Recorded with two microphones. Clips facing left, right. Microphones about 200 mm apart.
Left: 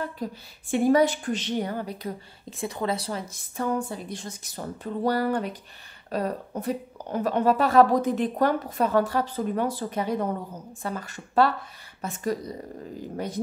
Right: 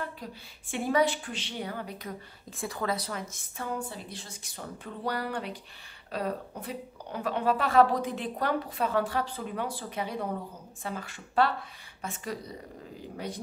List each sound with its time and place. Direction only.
0.0 s speech: 40° left (ahead or behind)
3.6 s speech: 45° left (ahead or behind)